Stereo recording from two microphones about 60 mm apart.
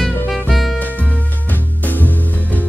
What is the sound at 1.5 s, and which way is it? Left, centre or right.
Music, left.